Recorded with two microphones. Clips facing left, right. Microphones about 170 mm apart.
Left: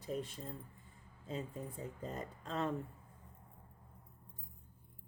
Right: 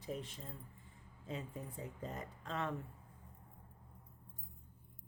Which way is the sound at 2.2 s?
30° left (ahead or behind).